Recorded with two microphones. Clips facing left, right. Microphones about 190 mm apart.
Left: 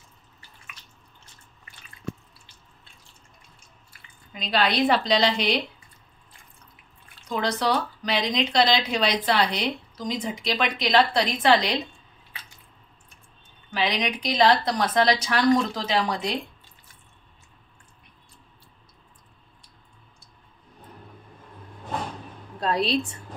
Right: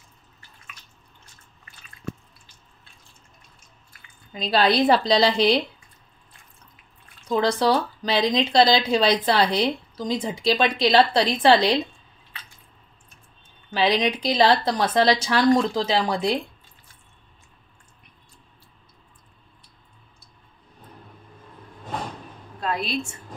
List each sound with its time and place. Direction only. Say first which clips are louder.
4.3 s speech: right 4 dB; 35° right (ahead or behind)
7.3 s speech: right 4 dB; 30° right (ahead or behind)
13.7 s speech: right 5 dB; 30° right (ahead or behind)
22.6 s a woman's voice: left 3 dB; 35° left (ahead or behind)